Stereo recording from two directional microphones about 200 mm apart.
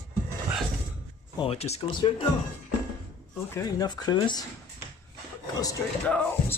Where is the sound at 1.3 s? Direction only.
30° left (ahead or behind).